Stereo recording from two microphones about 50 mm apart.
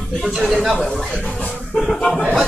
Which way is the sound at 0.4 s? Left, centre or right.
Centre.